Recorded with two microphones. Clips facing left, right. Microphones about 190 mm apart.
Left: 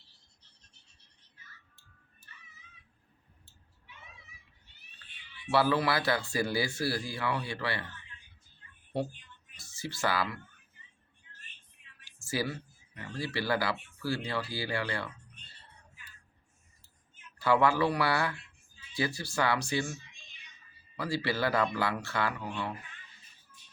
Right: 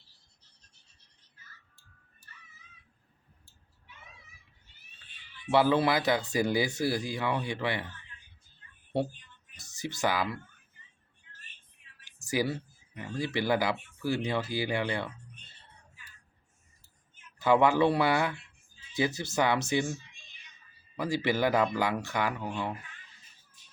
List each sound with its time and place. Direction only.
5.5 s speech: 20° right (ahead or behind)
9.6 s speech: 20° right (ahead or behind)
12.0 s a sound: 20° right (ahead or behind)
12.5 s speech: 20° right (ahead or behind)
17.3 s speech: 20° right (ahead or behind)